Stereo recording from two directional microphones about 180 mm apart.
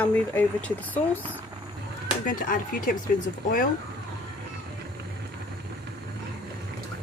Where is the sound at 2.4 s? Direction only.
50° left (ahead or behind).